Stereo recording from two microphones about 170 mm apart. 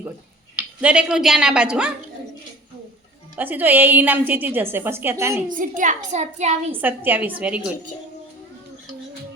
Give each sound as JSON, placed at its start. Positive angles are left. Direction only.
{"t": 0.5, "sound": "speech", "side_deg": -10}
{"t": 3.3, "sound": "a woman's voice", "side_deg": -10}
{"t": 5.5, "sound": "a child's voice", "side_deg": -50}
{"t": 6.7, "sound": "a woman's voice", "side_deg": -10}